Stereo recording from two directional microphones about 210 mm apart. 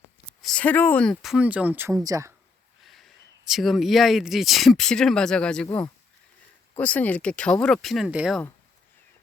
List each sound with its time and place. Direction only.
0.4 s speech: 5° left (ahead or behind)
1.2 s speech: 5° right (ahead or behind)
2.8 s speech: centre (ahead or behind)
5.6 s speech: 15° left (ahead or behind); by 8.4 s 5° right (ahead or behind)